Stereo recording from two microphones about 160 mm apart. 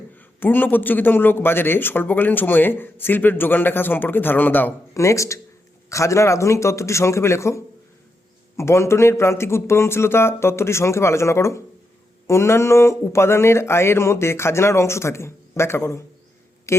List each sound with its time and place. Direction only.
0.2 s a man's voice: 10° left (ahead or behind)